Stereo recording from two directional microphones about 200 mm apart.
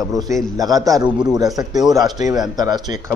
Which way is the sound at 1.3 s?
20° right (ahead or behind).